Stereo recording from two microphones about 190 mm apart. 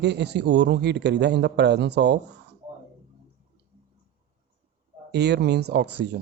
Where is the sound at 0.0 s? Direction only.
65° right (ahead or behind).